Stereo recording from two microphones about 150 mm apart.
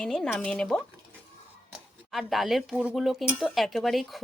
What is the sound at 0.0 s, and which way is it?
Speech, 5° left (ahead or behind).